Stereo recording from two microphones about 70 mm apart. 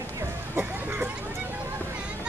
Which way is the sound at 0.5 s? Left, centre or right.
Right.